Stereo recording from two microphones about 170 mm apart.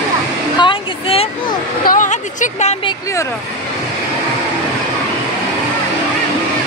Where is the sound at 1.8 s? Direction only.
45° left (ahead or behind).